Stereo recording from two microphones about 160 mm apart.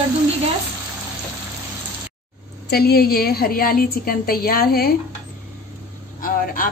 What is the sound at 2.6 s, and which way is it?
A woman's voice, 80° left.